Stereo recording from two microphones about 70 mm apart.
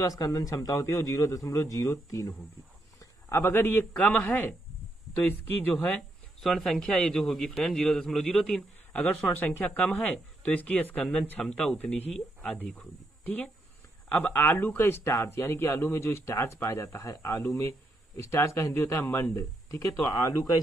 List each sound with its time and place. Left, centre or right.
0.2 s a man's voice: left
3.5 s speech: left
3.9 s a man's voice: centre
4.2 s speech: left
6.4 s a man's voice: centre
9.3 s speech: left
11.4 s speech: centre
11.8 s speech: left
20.1 s speech: left